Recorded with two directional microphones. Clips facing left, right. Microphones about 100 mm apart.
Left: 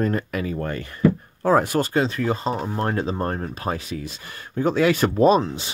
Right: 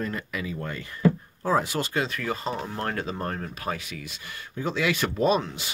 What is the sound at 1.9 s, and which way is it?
Speech, 30° left (ahead or behind).